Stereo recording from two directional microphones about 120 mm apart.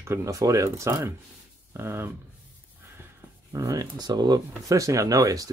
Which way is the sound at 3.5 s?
25° right (ahead or behind).